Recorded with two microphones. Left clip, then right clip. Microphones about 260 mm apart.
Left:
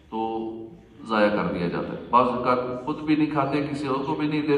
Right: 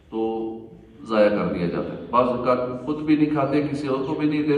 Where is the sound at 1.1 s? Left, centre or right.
Left.